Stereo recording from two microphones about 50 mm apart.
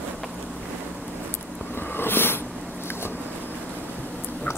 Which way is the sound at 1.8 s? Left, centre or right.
Left.